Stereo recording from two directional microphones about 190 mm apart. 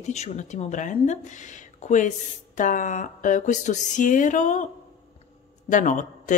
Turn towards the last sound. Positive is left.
turn(degrees=40)  # may be behind; listen again after turning